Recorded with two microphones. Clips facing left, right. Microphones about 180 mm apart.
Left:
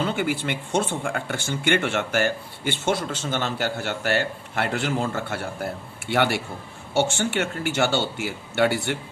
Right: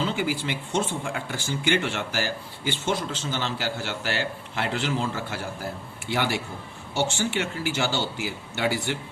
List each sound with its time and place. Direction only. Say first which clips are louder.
0.0 s speech: left 2 dB; 55° left (ahead or behind)